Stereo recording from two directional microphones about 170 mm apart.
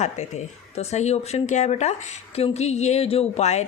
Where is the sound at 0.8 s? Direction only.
40° left (ahead or behind).